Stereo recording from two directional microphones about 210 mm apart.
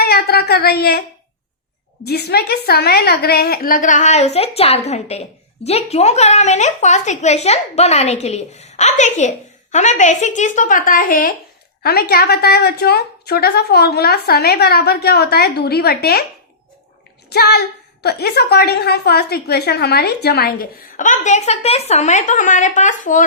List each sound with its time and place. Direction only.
0.0 s a woman's voice: 50° left (ahead or behind)
2.0 s a woman's voice: 50° left (ahead or behind)
17.2 s a woman's voice: 50° left (ahead or behind)